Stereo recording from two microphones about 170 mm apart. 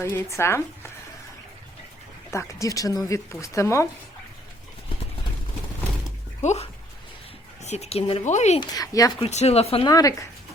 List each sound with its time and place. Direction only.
0.0 s speech: 15° left (ahead or behind)
2.3 s speech: 15° left (ahead or behind)
6.4 s speech: 40° left (ahead or behind)
8.7 s speech: 20° left (ahead or behind)
9.2 s speech: 40° left (ahead or behind)
9.9 s speech: 20° left (ahead or behind)